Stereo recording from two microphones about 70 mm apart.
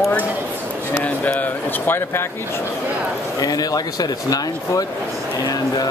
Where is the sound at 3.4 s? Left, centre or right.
Left.